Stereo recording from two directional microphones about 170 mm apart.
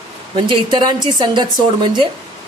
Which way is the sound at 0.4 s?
25° right (ahead or behind).